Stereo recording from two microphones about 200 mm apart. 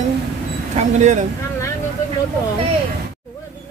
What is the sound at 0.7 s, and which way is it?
Speech, 35° right (ahead or behind).